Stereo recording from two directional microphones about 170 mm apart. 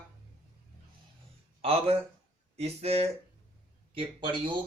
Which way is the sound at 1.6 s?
35° right (ahead or behind).